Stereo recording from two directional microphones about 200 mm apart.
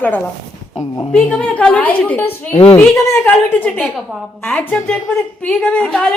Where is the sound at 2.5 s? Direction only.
30° left (ahead or behind).